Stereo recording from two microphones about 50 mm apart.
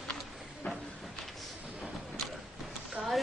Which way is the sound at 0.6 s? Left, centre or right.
Left.